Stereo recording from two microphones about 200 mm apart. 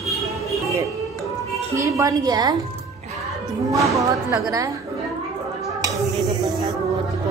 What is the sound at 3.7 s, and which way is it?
Speech, 15° right (ahead or behind).